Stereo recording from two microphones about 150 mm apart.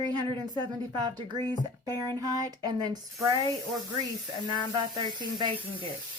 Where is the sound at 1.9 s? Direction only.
15° left (ahead or behind).